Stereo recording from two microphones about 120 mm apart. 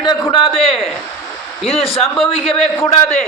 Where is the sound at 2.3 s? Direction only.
50° left (ahead or behind).